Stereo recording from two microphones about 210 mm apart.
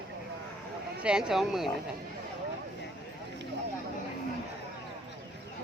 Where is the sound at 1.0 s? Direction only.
5° right (ahead or behind).